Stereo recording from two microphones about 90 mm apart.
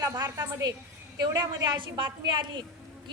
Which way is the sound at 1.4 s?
65° right (ahead or behind).